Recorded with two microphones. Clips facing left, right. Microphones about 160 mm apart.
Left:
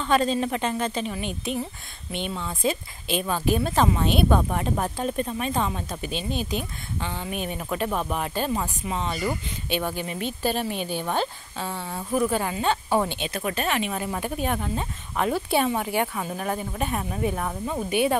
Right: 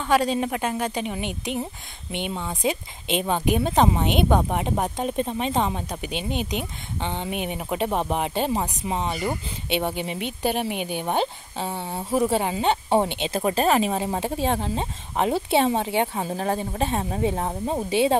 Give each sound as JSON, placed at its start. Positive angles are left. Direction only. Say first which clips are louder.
{"t": 0.0, "sound": "a woman's voice", "louder": "right 1 dB", "side_deg": -10}